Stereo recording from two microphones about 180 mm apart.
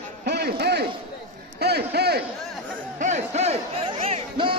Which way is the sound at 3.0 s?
40° right (ahead or behind).